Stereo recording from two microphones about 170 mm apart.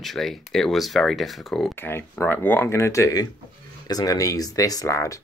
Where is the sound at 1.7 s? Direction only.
10° left (ahead or behind).